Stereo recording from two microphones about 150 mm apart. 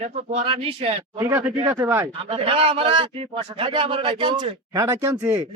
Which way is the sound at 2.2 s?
40° right (ahead or behind).